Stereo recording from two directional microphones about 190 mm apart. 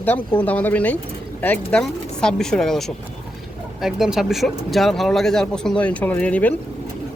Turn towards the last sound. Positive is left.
turn(degrees=5)  # may be behind; listen again after turning